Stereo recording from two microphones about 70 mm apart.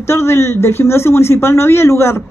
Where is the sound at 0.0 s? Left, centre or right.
Left.